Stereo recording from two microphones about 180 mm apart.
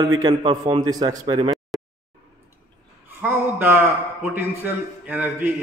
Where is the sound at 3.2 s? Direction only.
10° right (ahead or behind).